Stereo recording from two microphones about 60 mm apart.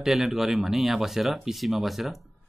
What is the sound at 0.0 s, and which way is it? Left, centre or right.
Speech, centre.